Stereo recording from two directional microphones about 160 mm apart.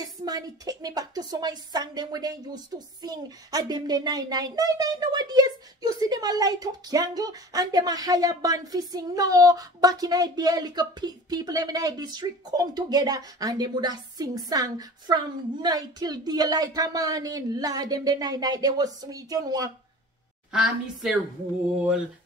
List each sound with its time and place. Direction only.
0.0 s a woman's voice: 25° right (ahead or behind)
20.5 s a woman's voice: 5° right (ahead or behind)